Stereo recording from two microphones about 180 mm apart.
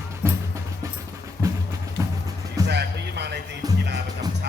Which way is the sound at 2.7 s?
65° right (ahead or behind).